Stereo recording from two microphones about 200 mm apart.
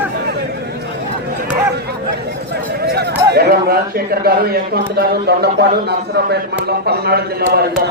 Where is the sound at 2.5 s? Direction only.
55° right (ahead or behind).